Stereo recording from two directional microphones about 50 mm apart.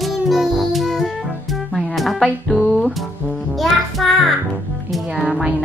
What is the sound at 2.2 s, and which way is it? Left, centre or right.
Music, left.